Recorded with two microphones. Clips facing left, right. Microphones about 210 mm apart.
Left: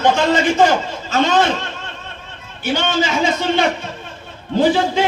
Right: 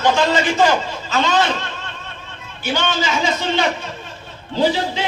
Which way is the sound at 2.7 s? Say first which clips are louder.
Left 3 dB; 50° left (ahead or behind).